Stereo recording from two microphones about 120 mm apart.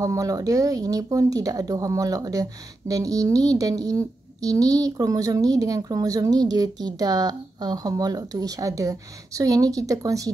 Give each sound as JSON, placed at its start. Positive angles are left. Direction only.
{"t": 0.0, "sound": "speech", "side_deg": -30}